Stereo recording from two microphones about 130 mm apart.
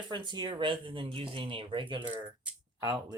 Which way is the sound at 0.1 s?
35° right (ahead or behind).